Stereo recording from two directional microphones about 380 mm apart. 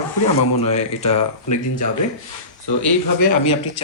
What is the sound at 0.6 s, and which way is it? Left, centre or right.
Speech, centre.